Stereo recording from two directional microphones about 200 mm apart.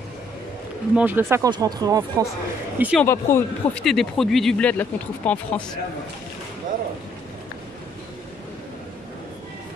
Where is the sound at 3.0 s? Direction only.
10° left (ahead or behind).